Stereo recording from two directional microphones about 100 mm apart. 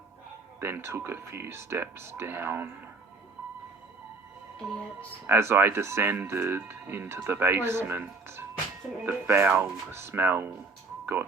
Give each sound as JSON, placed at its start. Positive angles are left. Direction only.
{"t": 0.6, "sound": "speech", "side_deg": -25}
{"t": 4.6, "sound": "speech", "side_deg": 0}
{"t": 4.9, "sound": "speech", "side_deg": -20}
{"t": 11.0, "sound": "music", "side_deg": -20}